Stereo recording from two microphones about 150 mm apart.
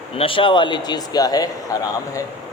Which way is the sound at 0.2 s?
35° left (ahead or behind).